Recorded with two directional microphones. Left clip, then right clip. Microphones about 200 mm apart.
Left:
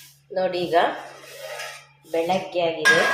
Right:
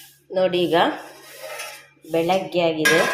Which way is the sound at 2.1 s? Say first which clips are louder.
Right 3 dB; 40° right (ahead or behind).